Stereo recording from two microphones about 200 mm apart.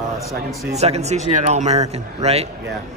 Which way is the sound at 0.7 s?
30° right (ahead or behind).